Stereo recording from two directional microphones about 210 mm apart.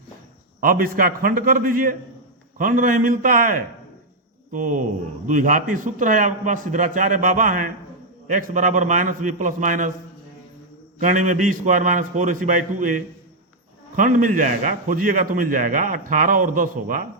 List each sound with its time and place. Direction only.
0.6 s a man's voice: 40° right (ahead or behind)
11.0 s a man's voice: 35° right (ahead or behind)